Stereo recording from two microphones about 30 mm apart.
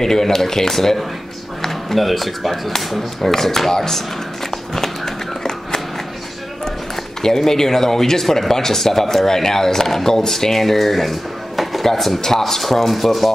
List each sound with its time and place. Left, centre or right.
0.0 s speech: centre
4.7 s a sound: centre
7.2 s speech: centre